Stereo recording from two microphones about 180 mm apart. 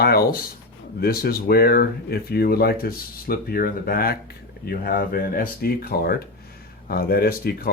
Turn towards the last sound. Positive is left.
turn(degrees=55)  # may be behind; listen again after turning